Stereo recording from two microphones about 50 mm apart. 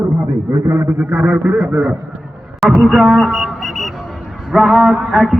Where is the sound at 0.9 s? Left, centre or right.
Centre.